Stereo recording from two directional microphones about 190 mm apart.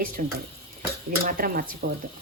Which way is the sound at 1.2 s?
50° right (ahead or behind).